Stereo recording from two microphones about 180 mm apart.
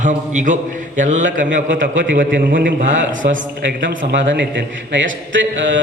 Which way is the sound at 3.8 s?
90° right.